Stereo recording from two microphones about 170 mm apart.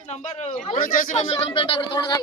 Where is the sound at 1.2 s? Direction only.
35° left (ahead or behind).